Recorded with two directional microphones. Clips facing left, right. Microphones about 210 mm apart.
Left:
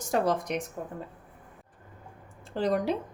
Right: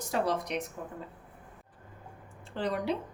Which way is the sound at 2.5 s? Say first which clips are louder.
Left 4 dB; 45° left (ahead or behind).